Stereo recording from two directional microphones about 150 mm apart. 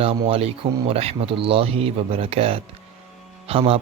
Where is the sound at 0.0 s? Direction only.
40° right (ahead or behind).